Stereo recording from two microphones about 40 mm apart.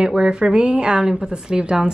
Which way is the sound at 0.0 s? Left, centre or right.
Right.